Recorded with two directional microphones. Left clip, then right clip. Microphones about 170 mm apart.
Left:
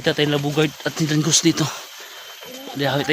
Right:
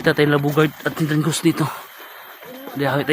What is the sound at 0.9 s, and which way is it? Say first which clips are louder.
Speech: left 1 dB; 5° right (ahead or behind).